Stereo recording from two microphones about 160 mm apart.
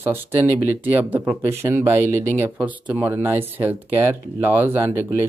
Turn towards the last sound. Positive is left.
turn(degrees=-15)  # may be behind; listen again after turning